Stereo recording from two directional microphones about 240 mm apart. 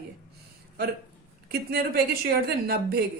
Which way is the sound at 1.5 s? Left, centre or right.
Right.